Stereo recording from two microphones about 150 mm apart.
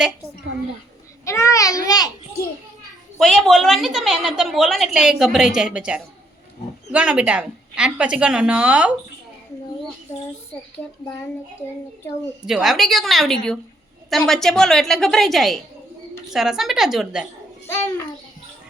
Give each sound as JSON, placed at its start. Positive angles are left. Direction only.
{"t": 1.2, "sound": "babbling", "side_deg": 20}
{"t": 1.9, "sound": "a child's voice", "side_deg": 25}
{"t": 3.2, "sound": "a woman's voice", "side_deg": 0}
{"t": 12.5, "sound": "a woman's voice", "side_deg": 0}